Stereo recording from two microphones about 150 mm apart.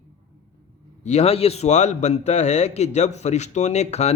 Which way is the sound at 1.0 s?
45° left (ahead or behind).